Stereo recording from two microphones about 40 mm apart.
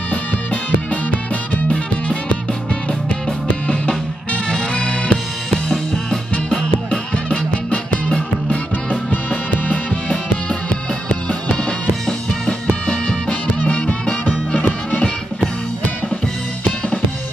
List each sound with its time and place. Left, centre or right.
0.1 s music: left
3.6 s music: left
5.5 s music: centre; by 8.5 s left
10.7 s music: left
13.0 s music: left